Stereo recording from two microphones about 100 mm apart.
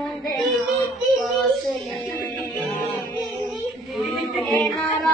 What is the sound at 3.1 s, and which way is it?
Music, centre (ahead or behind).